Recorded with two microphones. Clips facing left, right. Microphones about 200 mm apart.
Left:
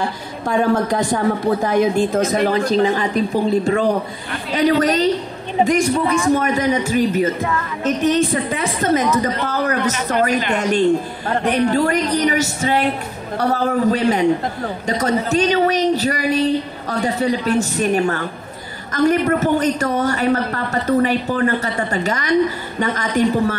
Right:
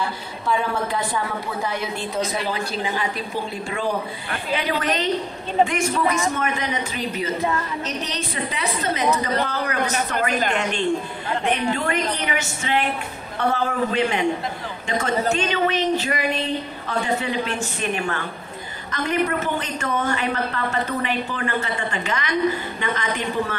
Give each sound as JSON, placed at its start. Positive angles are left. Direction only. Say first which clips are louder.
{"t": 0.0, "sound": "a woman's voice", "louder": "left 4 dB", "side_deg": 45}